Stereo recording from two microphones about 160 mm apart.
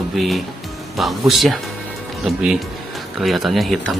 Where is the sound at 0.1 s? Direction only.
Centre (ahead or behind).